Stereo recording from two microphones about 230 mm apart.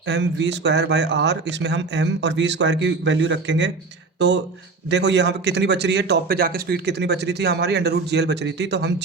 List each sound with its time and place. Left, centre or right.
0.1 s a man's voice: right
4.9 s a man's voice: right